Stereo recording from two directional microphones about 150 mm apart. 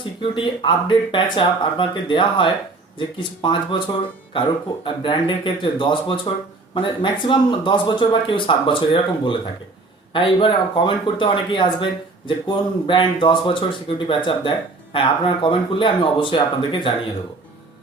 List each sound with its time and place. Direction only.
0.2 s speech: 30° left (ahead or behind)